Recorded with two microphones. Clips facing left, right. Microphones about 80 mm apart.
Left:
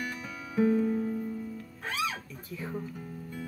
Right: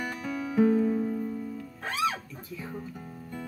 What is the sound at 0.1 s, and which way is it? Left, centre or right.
Music, right.